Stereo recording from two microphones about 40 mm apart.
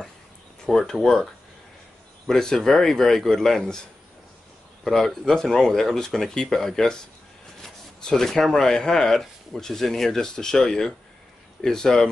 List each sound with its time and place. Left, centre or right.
0.7 s speech: centre
4.8 s speech: centre